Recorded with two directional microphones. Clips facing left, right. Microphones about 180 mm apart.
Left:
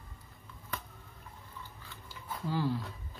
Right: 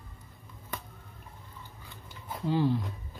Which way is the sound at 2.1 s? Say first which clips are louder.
Right 5 dB; 20° right (ahead or behind).